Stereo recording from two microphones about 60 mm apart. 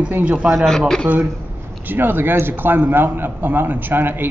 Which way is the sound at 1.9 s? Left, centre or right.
Right.